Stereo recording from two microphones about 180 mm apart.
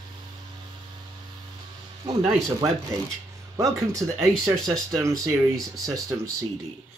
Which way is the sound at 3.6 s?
20° right (ahead or behind).